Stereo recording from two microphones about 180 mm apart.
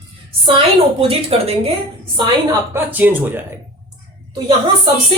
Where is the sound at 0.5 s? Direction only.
30° right (ahead or behind).